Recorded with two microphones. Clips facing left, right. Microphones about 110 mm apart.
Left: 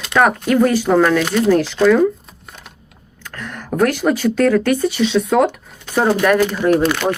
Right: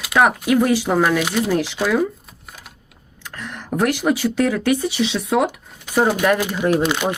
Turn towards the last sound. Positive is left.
turn(degrees=-15)  # may be behind; listen again after turning